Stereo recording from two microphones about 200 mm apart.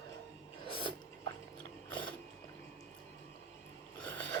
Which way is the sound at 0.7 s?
25° left (ahead or behind).